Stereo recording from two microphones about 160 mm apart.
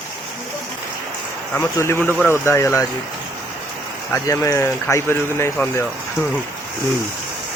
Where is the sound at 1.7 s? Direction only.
15° left (ahead or behind).